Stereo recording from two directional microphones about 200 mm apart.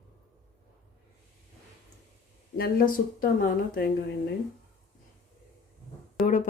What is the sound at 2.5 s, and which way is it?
Speech, 50° left (ahead or behind).